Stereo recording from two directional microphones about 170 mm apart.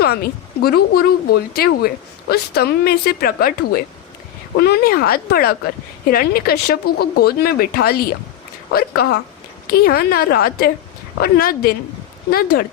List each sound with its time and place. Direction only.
0.0 s speech: 65° left (ahead or behind)
4.5 s speech: 70° left (ahead or behind)